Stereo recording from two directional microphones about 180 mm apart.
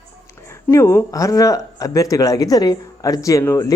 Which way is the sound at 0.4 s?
15° left (ahead or behind).